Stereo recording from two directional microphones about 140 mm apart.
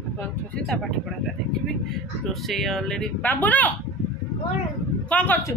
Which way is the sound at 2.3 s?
Centre (ahead or behind).